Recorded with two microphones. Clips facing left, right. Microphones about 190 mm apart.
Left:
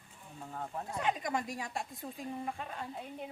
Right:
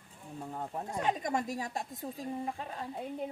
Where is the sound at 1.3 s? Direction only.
45° right (ahead or behind).